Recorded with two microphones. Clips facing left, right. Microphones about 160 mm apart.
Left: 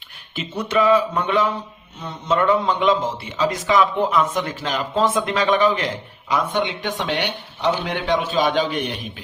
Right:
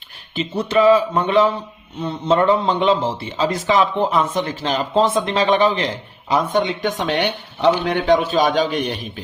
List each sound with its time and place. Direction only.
0.3 s a man's voice: 30° right (ahead or behind)